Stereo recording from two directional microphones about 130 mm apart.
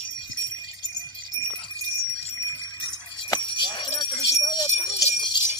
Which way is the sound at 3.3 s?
35° left (ahead or behind).